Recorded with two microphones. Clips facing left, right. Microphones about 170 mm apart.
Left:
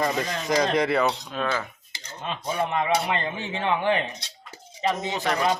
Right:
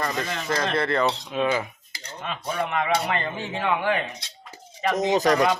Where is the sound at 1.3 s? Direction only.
15° right (ahead or behind).